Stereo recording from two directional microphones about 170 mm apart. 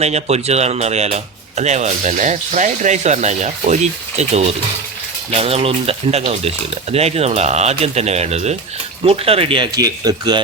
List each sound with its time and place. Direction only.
0.0 s speech: 40° right (ahead or behind); by 10.4 s 25° right (ahead or behind)